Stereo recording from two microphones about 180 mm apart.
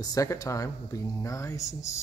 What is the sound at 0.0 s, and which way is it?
Speech, 20° left (ahead or behind).